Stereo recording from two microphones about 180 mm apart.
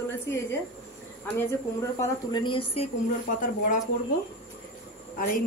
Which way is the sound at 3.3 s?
45° left (ahead or behind).